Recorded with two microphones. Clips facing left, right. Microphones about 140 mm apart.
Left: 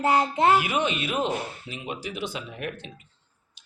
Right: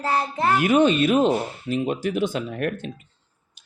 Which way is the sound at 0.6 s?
45° right (ahead or behind).